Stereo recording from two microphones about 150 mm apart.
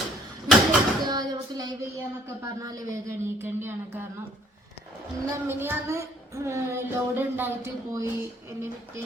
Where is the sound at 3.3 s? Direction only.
15° right (ahead or behind).